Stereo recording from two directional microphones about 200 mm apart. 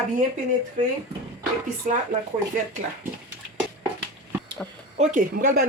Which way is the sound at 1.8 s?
40° right (ahead or behind).